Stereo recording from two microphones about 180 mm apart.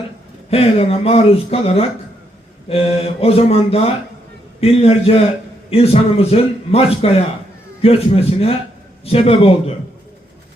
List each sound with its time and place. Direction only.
0.5 s a man's voice: 35° left (ahead or behind)